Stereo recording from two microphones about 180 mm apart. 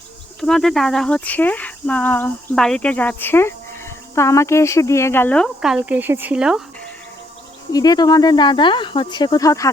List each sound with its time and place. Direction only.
0.3 s speech: centre (ahead or behind)
7.7 s speech: 20° left (ahead or behind)